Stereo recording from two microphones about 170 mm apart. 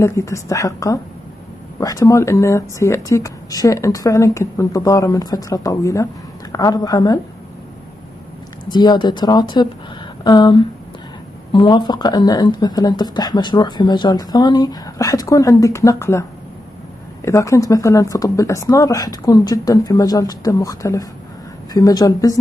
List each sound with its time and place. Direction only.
0.0 s speech: 15° left (ahead or behind)
8.6 s speech: 25° left (ahead or behind)